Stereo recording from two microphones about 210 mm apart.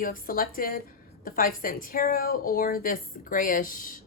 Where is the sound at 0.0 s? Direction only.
45° left (ahead or behind).